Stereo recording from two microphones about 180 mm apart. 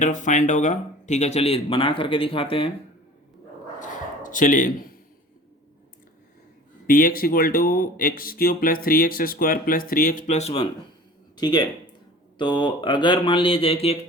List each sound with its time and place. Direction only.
0.0 s speech: 45° left (ahead or behind)
3.8 s bow-wow: 45° left (ahead or behind)
6.8 s speech: 55° left (ahead or behind); by 10.7 s 35° left (ahead or behind)
11.3 s speech: 25° left (ahead or behind)